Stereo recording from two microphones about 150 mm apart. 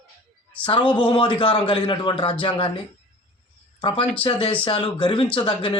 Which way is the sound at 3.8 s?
35° left (ahead or behind).